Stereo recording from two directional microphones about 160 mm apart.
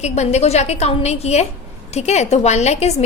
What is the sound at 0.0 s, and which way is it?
A woman's voice, 45° left (ahead or behind).